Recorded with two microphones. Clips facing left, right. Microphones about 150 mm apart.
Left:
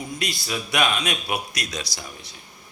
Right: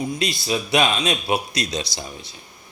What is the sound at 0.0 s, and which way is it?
A man's voice, 25° right (ahead or behind).